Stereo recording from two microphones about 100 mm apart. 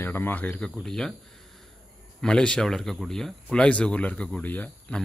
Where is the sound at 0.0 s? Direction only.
20° left (ahead or behind); by 1.1 s 5° left (ahead or behind).